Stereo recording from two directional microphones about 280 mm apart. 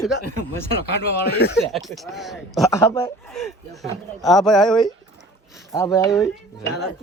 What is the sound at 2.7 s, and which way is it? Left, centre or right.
Speech, centre.